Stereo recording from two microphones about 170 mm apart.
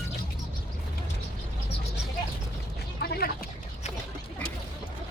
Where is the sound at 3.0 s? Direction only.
65° left (ahead or behind).